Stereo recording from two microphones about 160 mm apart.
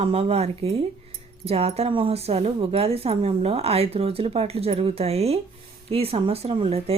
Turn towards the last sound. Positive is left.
turn(degrees=-40)  # may be behind; listen again after turning